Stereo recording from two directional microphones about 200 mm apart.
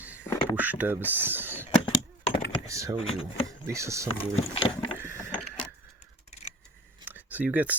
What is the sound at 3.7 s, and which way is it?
Speech, 15° right (ahead or behind).